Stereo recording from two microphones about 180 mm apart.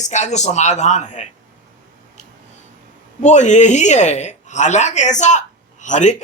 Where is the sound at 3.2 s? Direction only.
40° left (ahead or behind).